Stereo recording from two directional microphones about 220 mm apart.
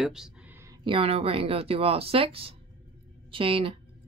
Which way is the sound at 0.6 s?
20° right (ahead or behind).